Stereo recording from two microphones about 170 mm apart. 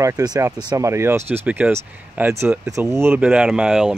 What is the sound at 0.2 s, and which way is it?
Speech, 20° right (ahead or behind).